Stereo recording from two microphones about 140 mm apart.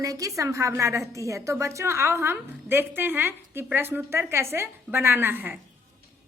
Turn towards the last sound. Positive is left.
turn(degrees=-15)  # may be behind; listen again after turning